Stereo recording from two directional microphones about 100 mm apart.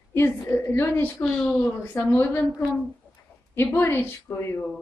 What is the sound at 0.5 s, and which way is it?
Speech, 25° left (ahead or behind).